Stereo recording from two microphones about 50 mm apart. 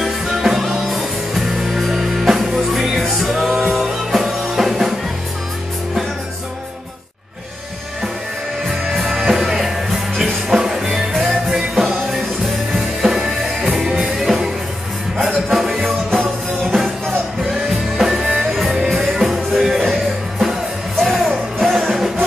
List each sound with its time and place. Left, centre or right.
0.0 s music: centre
9.2 s music: centre